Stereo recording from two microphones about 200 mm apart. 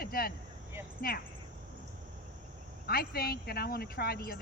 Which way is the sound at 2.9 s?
50° left (ahead or behind).